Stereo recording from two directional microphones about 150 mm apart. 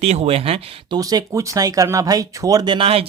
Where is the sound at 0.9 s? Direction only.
25° right (ahead or behind).